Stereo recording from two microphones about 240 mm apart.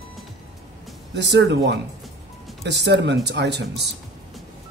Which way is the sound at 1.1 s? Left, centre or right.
Right.